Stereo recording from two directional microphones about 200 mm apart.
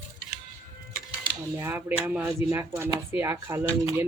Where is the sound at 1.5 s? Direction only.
10° right (ahead or behind).